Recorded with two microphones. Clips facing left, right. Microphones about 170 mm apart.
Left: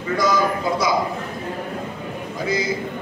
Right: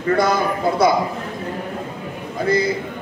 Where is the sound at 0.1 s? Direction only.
60° right (ahead or behind).